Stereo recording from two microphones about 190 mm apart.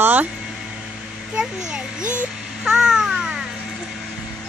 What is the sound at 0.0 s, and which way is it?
Speech, 10° right (ahead or behind).